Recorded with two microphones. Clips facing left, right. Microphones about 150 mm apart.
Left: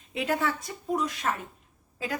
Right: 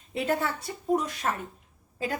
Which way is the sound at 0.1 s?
35° right (ahead or behind).